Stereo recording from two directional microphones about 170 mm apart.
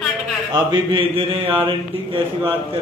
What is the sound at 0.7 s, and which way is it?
Mantra, 30° right (ahead or behind).